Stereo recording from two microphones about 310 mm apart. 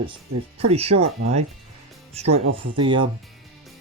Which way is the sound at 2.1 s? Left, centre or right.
Centre.